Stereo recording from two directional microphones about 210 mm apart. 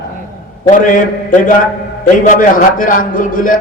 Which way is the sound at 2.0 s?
40° left (ahead or behind).